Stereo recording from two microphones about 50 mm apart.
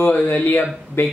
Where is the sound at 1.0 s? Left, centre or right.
Left.